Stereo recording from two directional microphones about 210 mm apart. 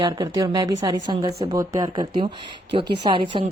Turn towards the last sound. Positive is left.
turn(degrees=-25)  # may be behind; listen again after turning